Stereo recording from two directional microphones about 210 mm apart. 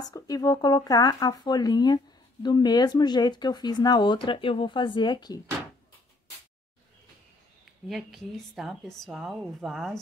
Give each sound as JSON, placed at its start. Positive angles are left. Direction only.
{"t": 0.1, "sound": "speech", "side_deg": 15}
{"t": 7.9, "sound": "a woman's voice", "side_deg": 0}